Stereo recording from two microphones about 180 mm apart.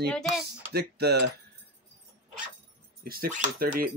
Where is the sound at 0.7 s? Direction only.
60° right (ahead or behind).